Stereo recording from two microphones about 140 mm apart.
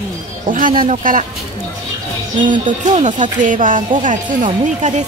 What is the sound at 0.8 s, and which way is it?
Speech, 70° right (ahead or behind).